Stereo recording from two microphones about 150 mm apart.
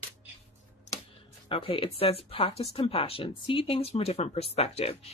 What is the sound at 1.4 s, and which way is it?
Speech, 35° left (ahead or behind).